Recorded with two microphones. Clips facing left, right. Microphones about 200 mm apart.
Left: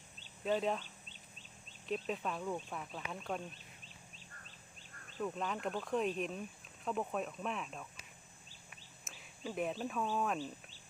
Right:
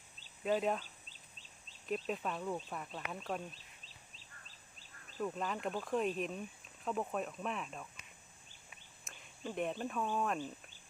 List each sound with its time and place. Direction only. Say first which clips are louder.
0.4 s speech: right 1 dB; 5° right (ahead or behind)
2.0 s speech: even; centre (ahead or behind)
3.5 s bird: left 3 dB; 30° right (ahead or behind)
5.1 s speech: even; 5° right (ahead or behind)
9.0 s speech: even; 5° left (ahead or behind)